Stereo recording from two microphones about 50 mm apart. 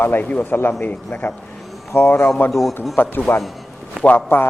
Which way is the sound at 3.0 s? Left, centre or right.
Left.